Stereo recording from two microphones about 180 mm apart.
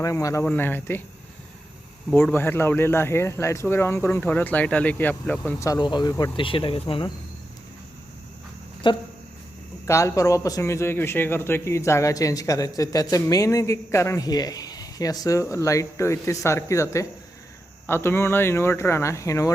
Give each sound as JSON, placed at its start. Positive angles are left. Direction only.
{"t": 0.0, "sound": "a man's voice", "side_deg": 15}
{"t": 2.1, "sound": "a man's voice", "side_deg": 10}
{"t": 8.8, "sound": "a man's voice", "side_deg": 25}